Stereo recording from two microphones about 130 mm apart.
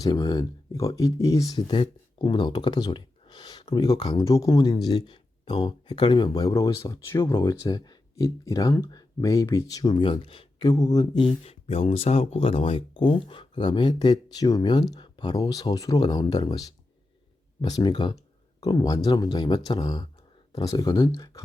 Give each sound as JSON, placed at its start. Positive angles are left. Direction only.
{"t": 0.0, "sound": "speech", "side_deg": 30}
{"t": 9.9, "sound": "speech", "side_deg": 40}